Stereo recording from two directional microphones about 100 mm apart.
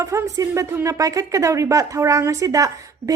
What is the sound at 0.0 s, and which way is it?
A woman's voice, 30° right (ahead or behind).